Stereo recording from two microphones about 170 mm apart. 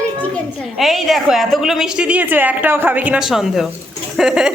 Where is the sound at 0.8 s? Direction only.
Centre (ahead or behind).